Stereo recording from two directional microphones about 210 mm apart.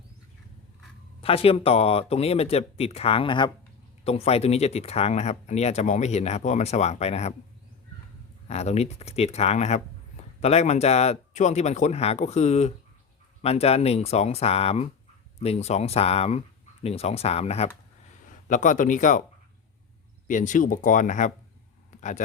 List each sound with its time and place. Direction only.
1.2 s speech: 25° left (ahead or behind)
8.4 s speech: 30° left (ahead or behind)
20.2 s speech: 35° left (ahead or behind)